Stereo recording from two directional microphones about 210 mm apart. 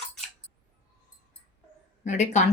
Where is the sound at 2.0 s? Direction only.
35° left (ahead or behind).